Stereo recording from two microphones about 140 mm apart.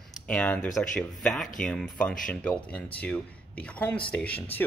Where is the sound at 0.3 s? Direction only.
10° left (ahead or behind).